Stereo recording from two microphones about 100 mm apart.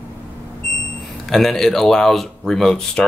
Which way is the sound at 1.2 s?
Centre (ahead or behind).